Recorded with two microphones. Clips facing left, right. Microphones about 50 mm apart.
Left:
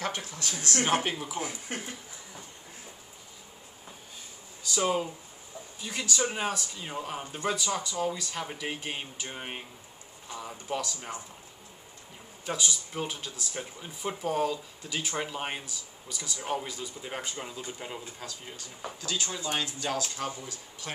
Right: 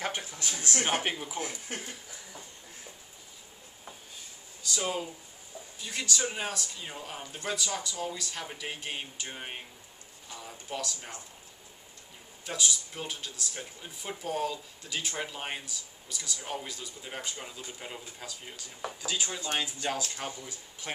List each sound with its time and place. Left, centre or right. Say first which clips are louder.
0.0 s speech: left 1 dB; centre
1.2 s speech: left 2 dB; centre
4.6 s speech: left 5 dB; centre
12.4 s speech: left 1 dB; centre
18.2 s speech: left 2 dB; centre